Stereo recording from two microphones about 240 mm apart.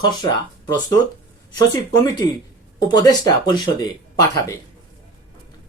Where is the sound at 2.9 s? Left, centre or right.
Centre.